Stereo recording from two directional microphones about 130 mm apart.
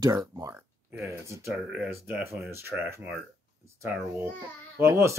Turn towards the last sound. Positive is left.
turn(degrees=-20)  # may be behind; listen again after turning